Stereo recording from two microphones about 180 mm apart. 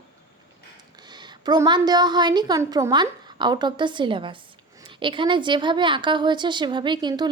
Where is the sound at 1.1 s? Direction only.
25° right (ahead or behind).